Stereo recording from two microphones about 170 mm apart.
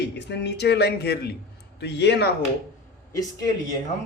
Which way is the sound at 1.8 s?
80° left.